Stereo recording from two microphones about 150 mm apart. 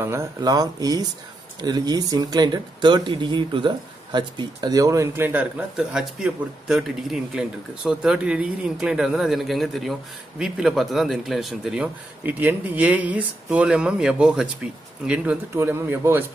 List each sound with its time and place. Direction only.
0.0 s speech: 20° right (ahead or behind)